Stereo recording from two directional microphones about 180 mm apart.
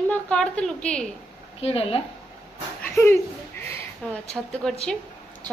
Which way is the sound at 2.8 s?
15° left (ahead or behind).